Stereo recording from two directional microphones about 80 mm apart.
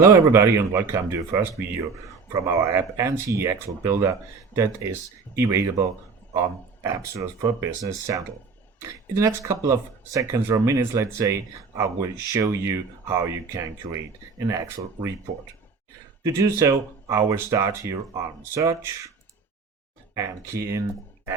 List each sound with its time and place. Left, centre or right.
0.0 s speech: right
2.3 s speech: right
16.2 s speech: right
20.1 s speech: right